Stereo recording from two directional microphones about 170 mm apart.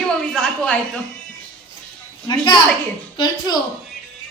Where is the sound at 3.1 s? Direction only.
25° left (ahead or behind).